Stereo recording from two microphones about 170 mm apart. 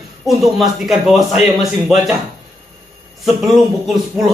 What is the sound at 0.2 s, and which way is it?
A man's voice, centre (ahead or behind).